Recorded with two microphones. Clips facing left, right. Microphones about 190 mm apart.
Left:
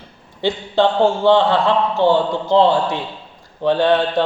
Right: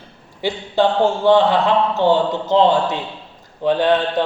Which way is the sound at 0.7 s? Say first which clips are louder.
Left 1 dB; 15° right (ahead or behind).